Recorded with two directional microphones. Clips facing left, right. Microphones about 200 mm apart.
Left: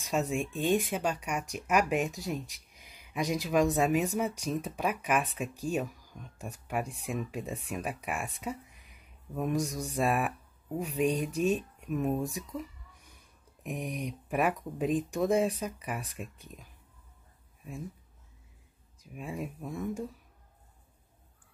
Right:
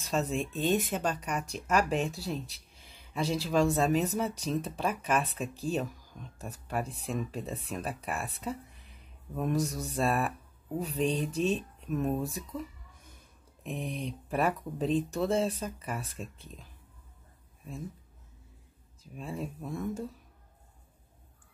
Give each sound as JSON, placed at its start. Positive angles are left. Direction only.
{"t": 0.0, "sound": "speech", "side_deg": 15}
{"t": 13.7, "sound": "speech", "side_deg": 10}
{"t": 19.1, "sound": "speech", "side_deg": 10}